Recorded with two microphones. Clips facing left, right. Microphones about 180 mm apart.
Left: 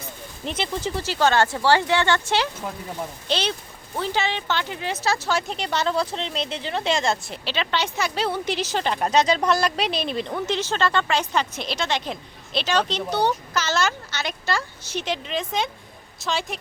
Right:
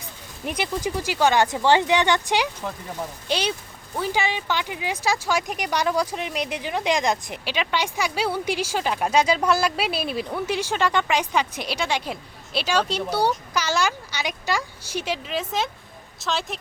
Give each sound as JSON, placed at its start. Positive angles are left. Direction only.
{"t": 0.4, "sound": "a woman's voice", "side_deg": -10}